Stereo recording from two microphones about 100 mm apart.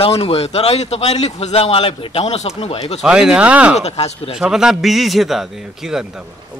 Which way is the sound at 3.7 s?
90° left.